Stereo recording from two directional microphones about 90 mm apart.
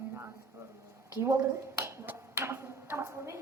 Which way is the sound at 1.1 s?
30° right (ahead or behind).